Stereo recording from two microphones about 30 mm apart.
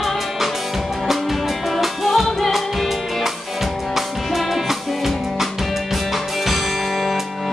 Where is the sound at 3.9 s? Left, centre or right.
Centre.